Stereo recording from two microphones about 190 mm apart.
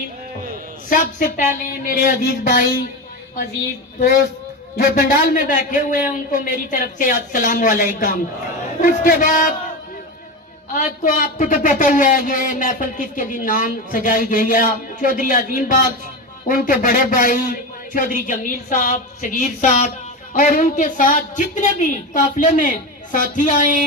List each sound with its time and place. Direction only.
0.9 s a man's voice: 45° left (ahead or behind)
4.8 s a man's voice: 45° left (ahead or behind)
10.7 s a man's voice: 40° left (ahead or behind)